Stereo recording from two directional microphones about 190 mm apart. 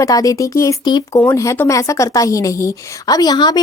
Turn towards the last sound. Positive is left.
turn(degrees=20)  # may be behind; listen again after turning